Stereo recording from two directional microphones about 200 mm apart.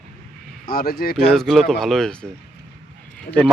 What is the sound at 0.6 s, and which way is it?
Speech, 50° left (ahead or behind).